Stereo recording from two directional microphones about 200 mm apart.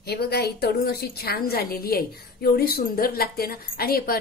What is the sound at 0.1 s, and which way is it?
A woman's voice, 55° left (ahead or behind).